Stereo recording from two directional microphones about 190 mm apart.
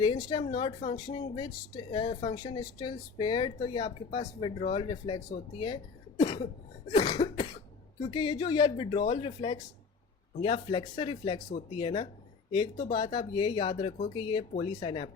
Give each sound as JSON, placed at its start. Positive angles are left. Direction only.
{"t": 0.0, "sound": "speech", "side_deg": 25}
{"t": 5.5, "sound": "cough", "side_deg": 25}
{"t": 6.9, "sound": "speech", "side_deg": 20}